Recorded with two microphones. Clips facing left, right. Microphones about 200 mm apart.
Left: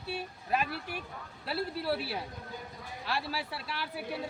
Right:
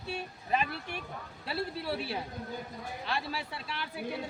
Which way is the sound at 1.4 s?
Centre (ahead or behind).